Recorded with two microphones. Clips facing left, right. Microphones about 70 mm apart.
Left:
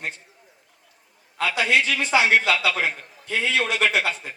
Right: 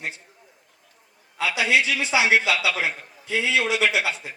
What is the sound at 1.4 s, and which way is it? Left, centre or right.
A man's voice, left.